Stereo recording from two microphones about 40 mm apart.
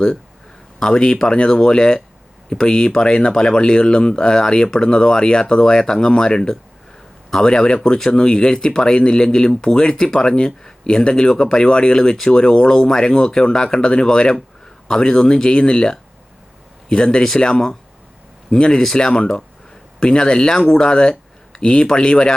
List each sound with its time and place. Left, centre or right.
0.8 s speech: left